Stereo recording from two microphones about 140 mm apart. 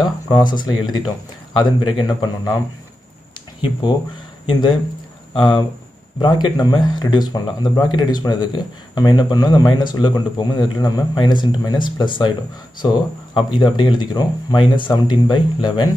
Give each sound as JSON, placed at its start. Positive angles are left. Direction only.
{"t": 0.0, "sound": "speech", "side_deg": 30}
{"t": 4.5, "sound": "speech", "side_deg": 35}